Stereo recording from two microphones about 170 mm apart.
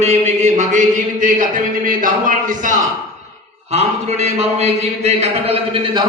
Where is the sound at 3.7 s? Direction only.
40° right (ahead or behind).